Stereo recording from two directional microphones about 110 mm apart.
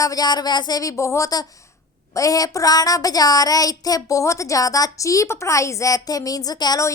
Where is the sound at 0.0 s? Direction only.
35° left (ahead or behind).